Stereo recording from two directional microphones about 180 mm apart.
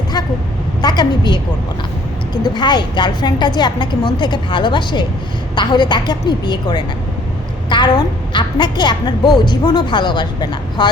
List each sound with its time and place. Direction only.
0.8 s a woman's voice: 25° left (ahead or behind)